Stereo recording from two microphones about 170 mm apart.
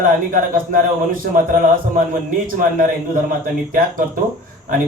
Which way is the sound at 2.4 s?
55° right (ahead or behind).